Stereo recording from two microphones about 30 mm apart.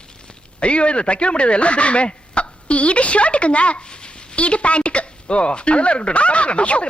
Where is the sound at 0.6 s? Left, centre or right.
Left.